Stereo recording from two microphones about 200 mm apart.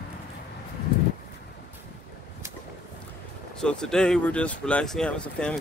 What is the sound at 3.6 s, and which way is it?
Speech, 5° left (ahead or behind).